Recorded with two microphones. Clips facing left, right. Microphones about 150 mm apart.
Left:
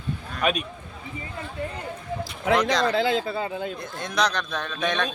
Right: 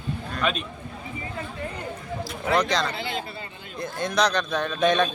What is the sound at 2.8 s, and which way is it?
Speech, 90° left.